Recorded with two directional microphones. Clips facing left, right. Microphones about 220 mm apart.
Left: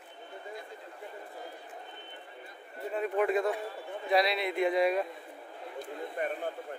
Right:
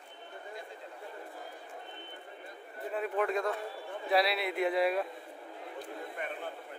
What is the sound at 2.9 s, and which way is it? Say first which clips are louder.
Speech: left 3 dB; centre (ahead or behind).